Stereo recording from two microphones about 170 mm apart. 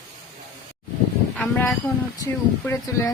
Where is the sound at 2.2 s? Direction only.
15° left (ahead or behind).